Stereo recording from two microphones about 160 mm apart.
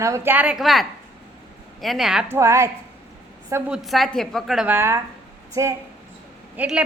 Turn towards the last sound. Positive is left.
turn(degrees=-10)  # may be behind; listen again after turning